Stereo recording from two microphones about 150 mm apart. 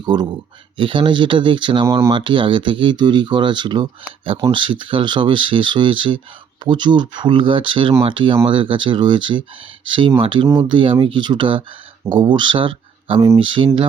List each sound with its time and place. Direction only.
0.0 s speech: 30° right (ahead or behind)
1.8 s speech: 20° right (ahead or behind)
2.0 s speech: 35° right (ahead or behind)